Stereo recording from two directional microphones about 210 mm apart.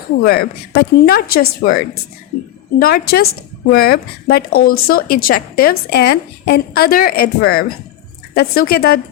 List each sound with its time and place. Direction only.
0.2 s a woman's voice: 45° left (ahead or behind)